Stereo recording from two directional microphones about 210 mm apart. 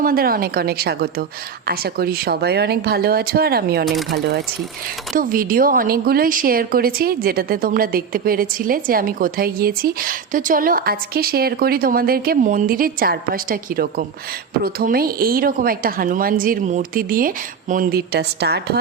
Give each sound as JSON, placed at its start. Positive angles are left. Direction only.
{"t": 0.0, "sound": "a woman's voice", "side_deg": -45}
{"t": 3.8, "sound": "speech", "side_deg": 0}
{"t": 5.1, "sound": "a woman's voice", "side_deg": -40}